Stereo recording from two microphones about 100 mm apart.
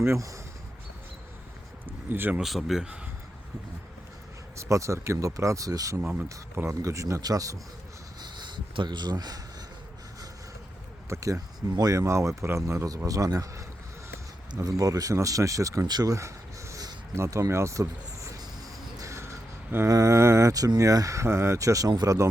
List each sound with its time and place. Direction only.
0.0 s speech: 30° right (ahead or behind)
2.0 s speech: 20° right (ahead or behind)
2.4 s speech: centre (ahead or behind)
4.5 s speech: 30° right (ahead or behind)
6.0 s speech: 15° right (ahead or behind)
6.2 s speech: 30° right (ahead or behind)
8.2 s a sound: 45° right (ahead or behind)
11.1 s speech: 30° right (ahead or behind)
18.9 s a sound: 30° right (ahead or behind)
19.9 s speech: 30° right (ahead or behind)